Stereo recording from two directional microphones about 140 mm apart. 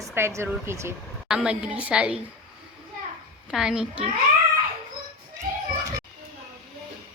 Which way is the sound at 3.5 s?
5° right (ahead or behind).